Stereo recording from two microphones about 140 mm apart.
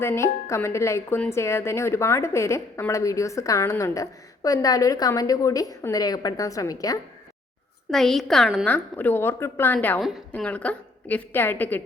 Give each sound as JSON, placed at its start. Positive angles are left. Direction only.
{"t": 0.0, "sound": "a woman's voice", "side_deg": 20}
{"t": 7.9, "sound": "a woman's voice", "side_deg": 0}
{"t": 8.6, "sound": "a woman's voice", "side_deg": 10}